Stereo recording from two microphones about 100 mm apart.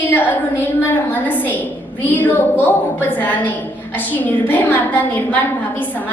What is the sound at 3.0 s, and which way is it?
A woman's voice, 20° left (ahead or behind).